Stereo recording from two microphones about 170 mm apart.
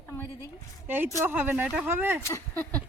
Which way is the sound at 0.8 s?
10° right (ahead or behind).